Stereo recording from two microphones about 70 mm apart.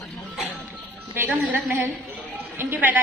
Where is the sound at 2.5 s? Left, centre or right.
Right.